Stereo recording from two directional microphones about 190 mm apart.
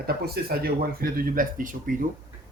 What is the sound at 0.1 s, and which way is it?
Speech, 55° right (ahead or behind).